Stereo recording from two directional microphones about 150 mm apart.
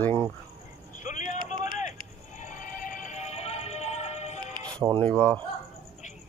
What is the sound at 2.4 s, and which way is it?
Music, 60° left (ahead or behind).